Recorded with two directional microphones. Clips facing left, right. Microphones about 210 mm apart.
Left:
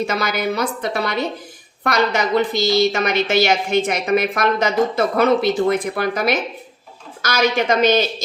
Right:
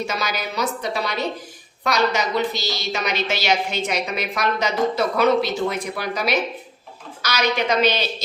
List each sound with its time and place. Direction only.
0.1 s a woman's voice: 55° left (ahead or behind)